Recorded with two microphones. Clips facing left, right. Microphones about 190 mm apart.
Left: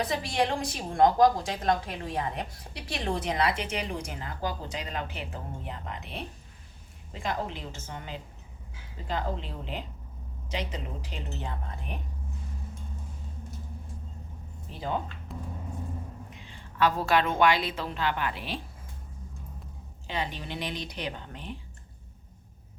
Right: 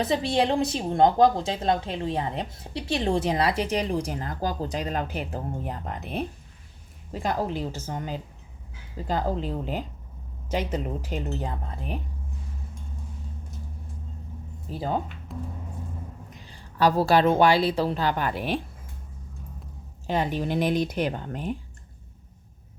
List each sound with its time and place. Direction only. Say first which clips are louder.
0.0 s a woman's voice: right 5 dB; 30° right (ahead or behind)
14.7 s a woman's voice: right 5 dB; 40° right (ahead or behind)
15.3 s music: right 5 dB; centre (ahead or behind)
16.3 s a woman's voice: right 1 dB; 40° right (ahead or behind)
20.1 s speech: right 8 dB; 45° right (ahead or behind)